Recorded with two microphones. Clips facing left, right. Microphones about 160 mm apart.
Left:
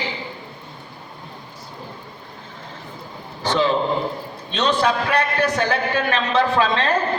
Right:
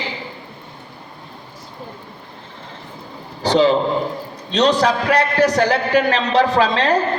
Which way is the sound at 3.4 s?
35° right (ahead or behind).